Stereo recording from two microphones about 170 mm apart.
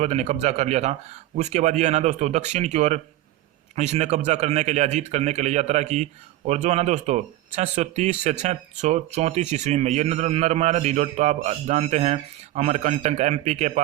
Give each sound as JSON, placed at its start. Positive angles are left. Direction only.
{"t": 0.0, "sound": "a man's voice", "side_deg": -40}